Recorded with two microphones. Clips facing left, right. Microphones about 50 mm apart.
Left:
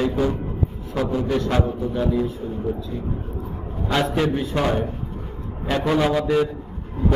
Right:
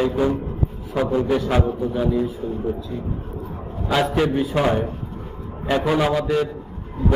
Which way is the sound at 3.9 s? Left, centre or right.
Centre.